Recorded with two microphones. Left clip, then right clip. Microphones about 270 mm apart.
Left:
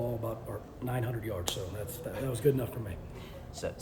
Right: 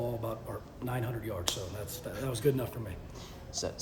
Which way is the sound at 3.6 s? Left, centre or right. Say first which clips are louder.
Right 1 dB; right.